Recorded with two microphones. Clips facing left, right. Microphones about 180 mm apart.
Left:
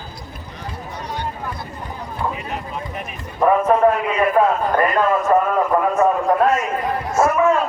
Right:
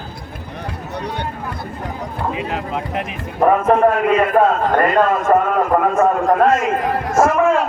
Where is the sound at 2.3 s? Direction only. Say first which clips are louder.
Right 5 dB; 90° right.